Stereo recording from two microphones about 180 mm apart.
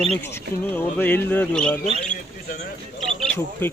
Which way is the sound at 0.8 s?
10° left (ahead or behind).